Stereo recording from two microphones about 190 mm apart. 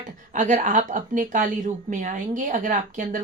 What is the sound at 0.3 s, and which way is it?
Speech, 40° right (ahead or behind).